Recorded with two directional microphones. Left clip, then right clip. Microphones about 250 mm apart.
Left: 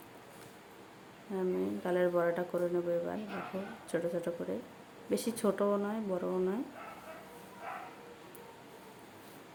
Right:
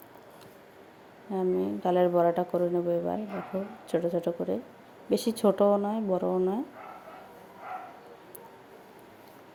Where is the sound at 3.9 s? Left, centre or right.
Centre.